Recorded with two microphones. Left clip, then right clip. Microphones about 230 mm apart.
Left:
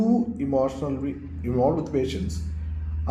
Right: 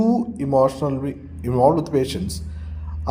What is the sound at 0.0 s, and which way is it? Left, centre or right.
A man's voice, right.